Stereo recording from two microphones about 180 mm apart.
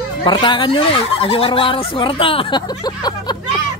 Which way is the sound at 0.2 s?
25° left (ahead or behind).